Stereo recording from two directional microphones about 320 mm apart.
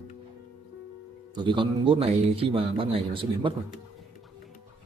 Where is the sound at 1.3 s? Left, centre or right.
Centre.